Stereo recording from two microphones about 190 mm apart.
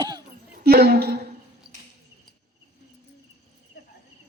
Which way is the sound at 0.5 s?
55° right (ahead or behind).